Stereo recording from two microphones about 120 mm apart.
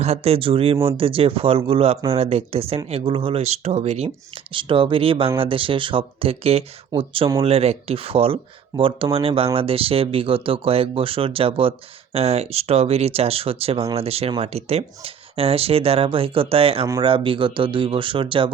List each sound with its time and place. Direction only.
0.0 s speech: 55° right (ahead or behind)
4.5 s speech: 50° right (ahead or behind)
12.1 s speech: 60° right (ahead or behind); by 18.5 s 45° right (ahead or behind)